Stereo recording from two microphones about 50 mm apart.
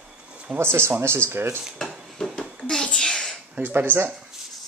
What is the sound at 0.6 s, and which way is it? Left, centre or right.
Speech, right.